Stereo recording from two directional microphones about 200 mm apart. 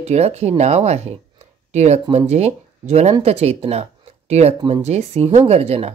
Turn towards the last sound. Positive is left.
turn(degrees=-30)  # may be behind; listen again after turning